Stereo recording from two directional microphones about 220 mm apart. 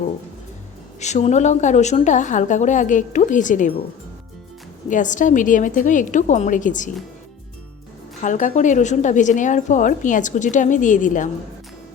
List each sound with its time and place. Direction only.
0.9 s a woman's voice: 30° left (ahead or behind)
4.9 s a woman's voice: 35° left (ahead or behind)
8.2 s a woman's voice: 35° left (ahead or behind)